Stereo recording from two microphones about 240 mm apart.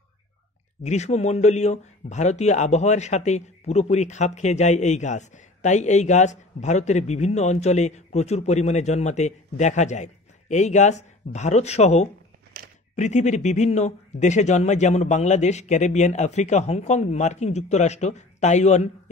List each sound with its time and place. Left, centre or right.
0.8 s a man's voice: left
12.6 s a sound: right
12.9 s a man's voice: left